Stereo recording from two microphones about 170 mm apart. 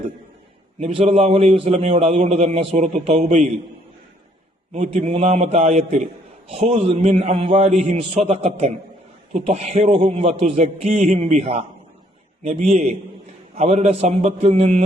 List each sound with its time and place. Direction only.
0.8 s a man's voice: 35° right (ahead or behind)
4.7 s a man's voice: 45° right (ahead or behind)